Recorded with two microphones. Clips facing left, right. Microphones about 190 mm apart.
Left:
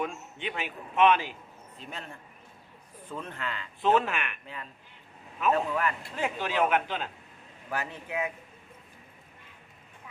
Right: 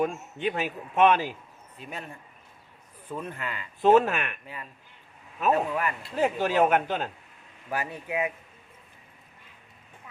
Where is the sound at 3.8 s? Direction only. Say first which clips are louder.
Right 6 dB; 40° right (ahead or behind).